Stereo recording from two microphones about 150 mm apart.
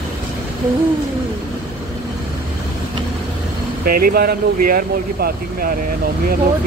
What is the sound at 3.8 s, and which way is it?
Speech, 75° right (ahead or behind).